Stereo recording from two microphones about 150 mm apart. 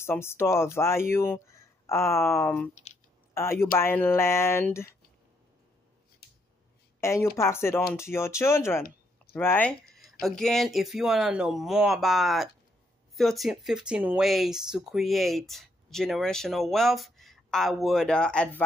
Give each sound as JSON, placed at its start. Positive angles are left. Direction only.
{"t": 0.0, "sound": "speech", "side_deg": 15}
{"t": 2.7, "sound": "speech", "side_deg": 50}
{"t": 3.3, "sound": "speech", "side_deg": 15}
{"t": 7.0, "sound": "speech", "side_deg": 20}